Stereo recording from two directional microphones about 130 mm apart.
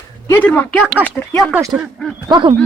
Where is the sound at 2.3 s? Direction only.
35° right (ahead or behind).